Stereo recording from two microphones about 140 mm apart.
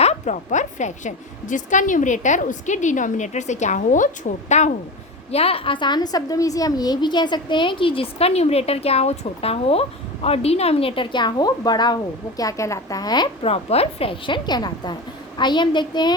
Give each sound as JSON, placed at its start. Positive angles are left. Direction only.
{"t": 0.0, "sound": "a woman's voice", "side_deg": 55}
{"t": 5.3, "sound": "a woman's voice", "side_deg": 45}